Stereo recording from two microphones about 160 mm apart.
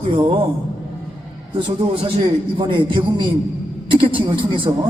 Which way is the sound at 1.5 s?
30° right (ahead or behind).